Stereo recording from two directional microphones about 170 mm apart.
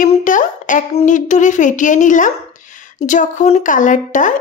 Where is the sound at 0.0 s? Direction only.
50° left (ahead or behind).